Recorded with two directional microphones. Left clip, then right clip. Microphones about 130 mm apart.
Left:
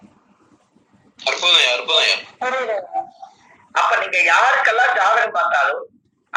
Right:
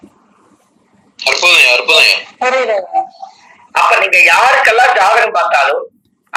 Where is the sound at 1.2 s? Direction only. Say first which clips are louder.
Right 7 dB; 25° right (ahead or behind).